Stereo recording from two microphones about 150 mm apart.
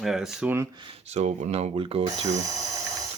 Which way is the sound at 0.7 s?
35° right (ahead or behind).